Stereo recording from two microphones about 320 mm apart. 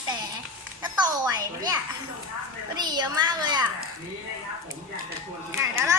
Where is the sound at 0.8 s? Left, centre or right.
Centre.